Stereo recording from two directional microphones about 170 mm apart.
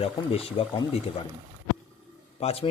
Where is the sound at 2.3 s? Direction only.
35° left (ahead or behind).